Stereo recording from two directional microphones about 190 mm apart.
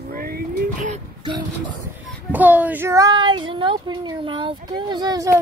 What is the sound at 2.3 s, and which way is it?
Speech, 10° right (ahead or behind).